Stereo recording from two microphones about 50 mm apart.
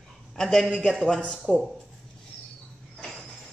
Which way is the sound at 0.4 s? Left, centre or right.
Centre.